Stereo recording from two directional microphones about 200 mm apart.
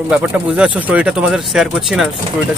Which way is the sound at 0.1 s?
5° right (ahead or behind).